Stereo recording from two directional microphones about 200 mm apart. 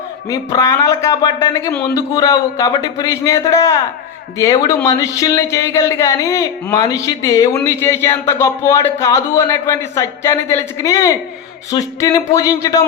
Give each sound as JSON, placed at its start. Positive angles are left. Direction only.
{"t": 0.3, "sound": "speech", "side_deg": 15}